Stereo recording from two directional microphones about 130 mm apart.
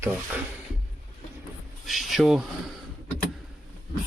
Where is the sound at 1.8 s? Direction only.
Centre (ahead or behind).